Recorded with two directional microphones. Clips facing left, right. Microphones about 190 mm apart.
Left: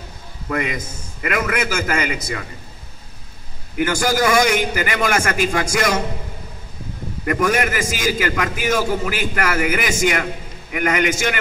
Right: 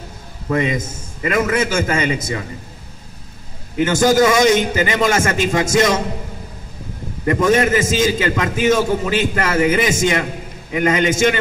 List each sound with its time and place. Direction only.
0.5 s a man's voice: 25° right (ahead or behind)
3.7 s a man's voice: 25° right (ahead or behind)
7.2 s a man's voice: 25° right (ahead or behind)